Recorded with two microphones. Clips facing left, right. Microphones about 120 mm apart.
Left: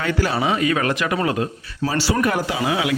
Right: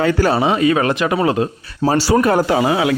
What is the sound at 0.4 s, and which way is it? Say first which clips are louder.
Speech: right 5 dB; 30° right (ahead or behind).